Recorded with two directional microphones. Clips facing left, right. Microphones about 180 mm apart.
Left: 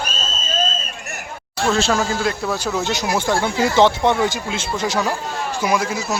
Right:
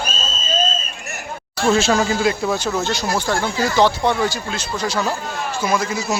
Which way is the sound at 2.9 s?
15° left (ahead or behind).